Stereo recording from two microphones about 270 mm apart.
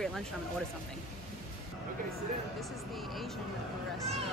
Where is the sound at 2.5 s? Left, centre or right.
Centre.